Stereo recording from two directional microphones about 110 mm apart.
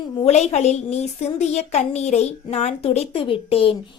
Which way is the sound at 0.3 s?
90° left.